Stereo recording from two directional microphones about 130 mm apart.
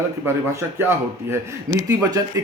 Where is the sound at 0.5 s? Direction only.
20° right (ahead or behind).